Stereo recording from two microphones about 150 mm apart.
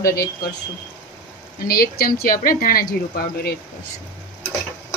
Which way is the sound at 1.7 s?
85° left.